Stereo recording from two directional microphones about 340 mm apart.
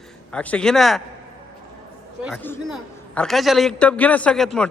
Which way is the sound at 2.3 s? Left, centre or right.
Centre.